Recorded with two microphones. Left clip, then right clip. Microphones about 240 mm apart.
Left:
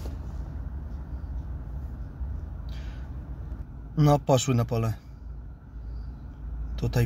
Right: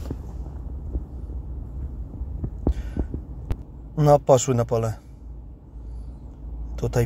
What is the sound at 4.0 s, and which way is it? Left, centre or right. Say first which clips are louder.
Speech: right 7 dB; centre.